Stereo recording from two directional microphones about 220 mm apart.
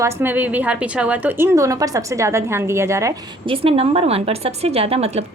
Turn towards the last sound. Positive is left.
turn(degrees=-30)  # may be behind; listen again after turning